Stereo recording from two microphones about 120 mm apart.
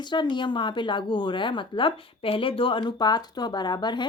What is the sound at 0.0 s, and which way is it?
Speech, 40° left (ahead or behind).